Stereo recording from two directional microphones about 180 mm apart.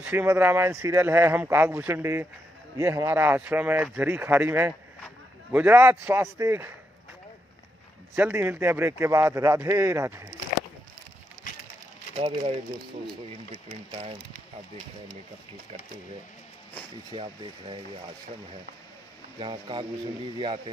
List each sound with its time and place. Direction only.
0.0 s speech: 10° right (ahead or behind)
8.2 s speech: 10° right (ahead or behind)
12.2 s speech: 35° right (ahead or behind)
13.7 s speech: 35° right (ahead or behind)
17.1 s speech: 30° right (ahead or behind)
19.4 s speech: 30° right (ahead or behind)